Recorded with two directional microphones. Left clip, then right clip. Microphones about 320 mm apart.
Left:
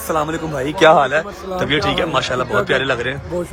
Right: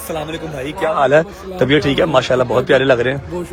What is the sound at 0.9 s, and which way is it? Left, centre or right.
A man's voice, centre.